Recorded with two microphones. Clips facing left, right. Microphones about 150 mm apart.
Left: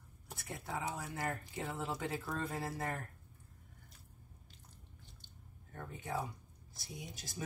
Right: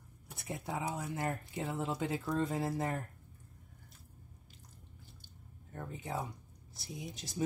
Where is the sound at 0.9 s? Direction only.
20° right (ahead or behind).